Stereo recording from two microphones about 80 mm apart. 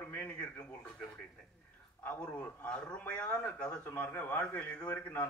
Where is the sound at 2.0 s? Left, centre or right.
Centre.